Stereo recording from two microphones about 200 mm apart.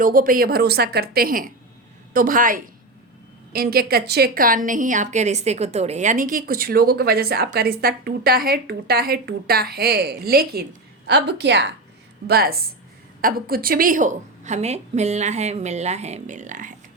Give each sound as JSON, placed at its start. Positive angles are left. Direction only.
{"t": 0.0, "sound": "a woman's voice", "side_deg": -45}